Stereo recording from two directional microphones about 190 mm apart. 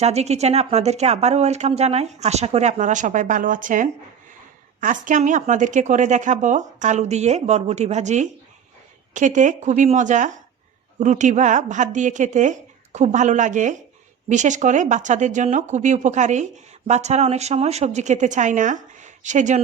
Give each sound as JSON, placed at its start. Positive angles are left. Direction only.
{"t": 0.0, "sound": "speech", "side_deg": -35}